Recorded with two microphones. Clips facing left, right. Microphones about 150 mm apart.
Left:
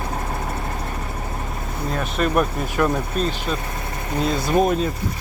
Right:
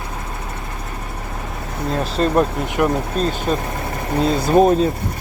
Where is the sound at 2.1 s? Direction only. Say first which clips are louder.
Right 3 dB; 25° right (ahead or behind).